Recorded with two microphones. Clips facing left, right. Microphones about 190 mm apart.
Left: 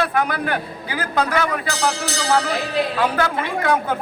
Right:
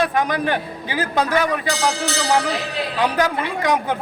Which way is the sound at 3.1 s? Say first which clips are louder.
Right 1 dB; 15° right (ahead or behind).